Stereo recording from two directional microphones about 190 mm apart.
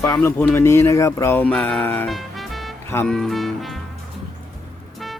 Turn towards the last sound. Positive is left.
turn(degrees=0)  # may be behind; listen again after turning